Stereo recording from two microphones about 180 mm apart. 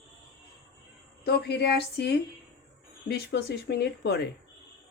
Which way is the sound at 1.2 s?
65° left (ahead or behind).